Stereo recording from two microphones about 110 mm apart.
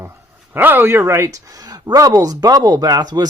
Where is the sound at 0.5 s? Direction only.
20° right (ahead or behind).